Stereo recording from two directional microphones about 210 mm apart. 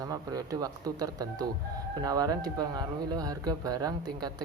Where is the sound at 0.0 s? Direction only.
15° right (ahead or behind).